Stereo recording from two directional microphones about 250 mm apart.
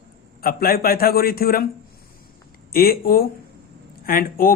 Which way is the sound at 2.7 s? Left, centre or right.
Left.